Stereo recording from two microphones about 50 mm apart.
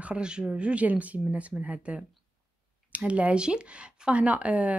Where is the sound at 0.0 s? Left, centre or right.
Centre.